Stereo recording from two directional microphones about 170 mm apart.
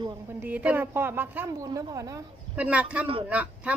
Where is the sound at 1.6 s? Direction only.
20° right (ahead or behind).